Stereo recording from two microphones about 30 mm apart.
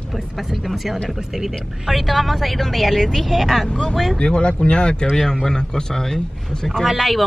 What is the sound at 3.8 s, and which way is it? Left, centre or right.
Speech, centre.